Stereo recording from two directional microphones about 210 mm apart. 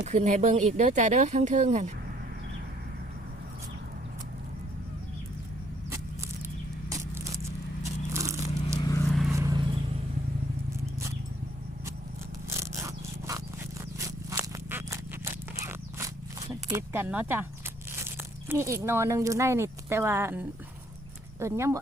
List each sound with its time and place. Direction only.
0.0 s speech: 35° right (ahead or behind)
8.1 s biting: 15° right (ahead or behind)
9.0 s vehicle: centre (ahead or behind)
9.3 s vehicle: 15° right (ahead or behind)
12.5 s scrape: 15° right (ahead or behind)
17.9 s speech: 10° right (ahead or behind)